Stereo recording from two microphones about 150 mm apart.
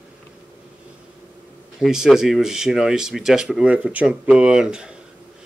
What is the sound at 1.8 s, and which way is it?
Speech, centre (ahead or behind).